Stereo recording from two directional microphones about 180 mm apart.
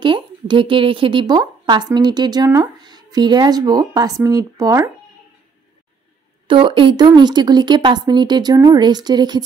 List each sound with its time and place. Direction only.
0.0 s speech: 25° right (ahead or behind)
6.4 s speech: 30° right (ahead or behind)